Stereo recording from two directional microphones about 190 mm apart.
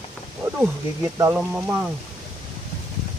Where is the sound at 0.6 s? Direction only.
15° right (ahead or behind).